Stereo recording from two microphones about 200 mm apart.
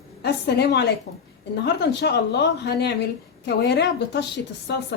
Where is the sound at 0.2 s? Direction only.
55° left (ahead or behind).